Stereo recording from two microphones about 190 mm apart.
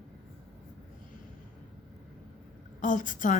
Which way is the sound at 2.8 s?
45° left (ahead or behind).